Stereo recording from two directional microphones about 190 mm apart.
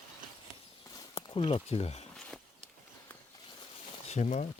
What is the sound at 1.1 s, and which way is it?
Speech, 25° left (ahead or behind).